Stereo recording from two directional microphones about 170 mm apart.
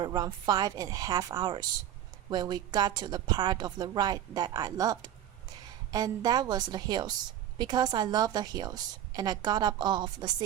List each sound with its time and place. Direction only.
0.0 s a woman's voice: 25° right (ahead or behind)